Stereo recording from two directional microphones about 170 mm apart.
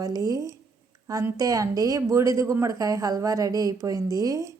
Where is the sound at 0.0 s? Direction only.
20° right (ahead or behind).